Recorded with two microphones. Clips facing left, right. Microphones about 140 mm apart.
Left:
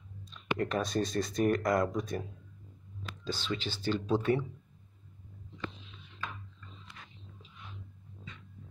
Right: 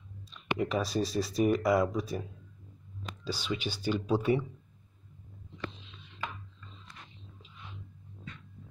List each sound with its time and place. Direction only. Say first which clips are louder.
0.6 s speech: right 1 dB; 5° right (ahead or behind)
5.9 s chopping: right 2 dB; 85° right